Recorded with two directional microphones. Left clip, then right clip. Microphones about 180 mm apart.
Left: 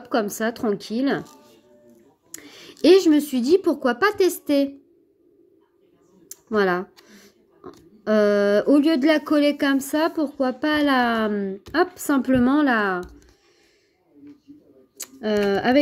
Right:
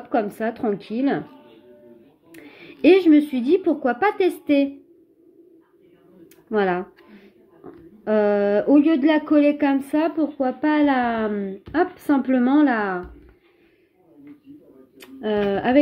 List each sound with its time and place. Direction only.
0.1 s speech: 40° left (ahead or behind)
2.3 s a woman's voice: 35° left (ahead or behind)
6.2 s speech: 35° left (ahead or behind)
15.0 s speech: 35° left (ahead or behind)